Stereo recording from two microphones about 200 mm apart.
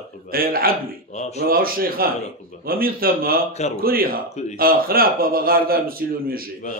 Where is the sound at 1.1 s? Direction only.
35° left (ahead or behind).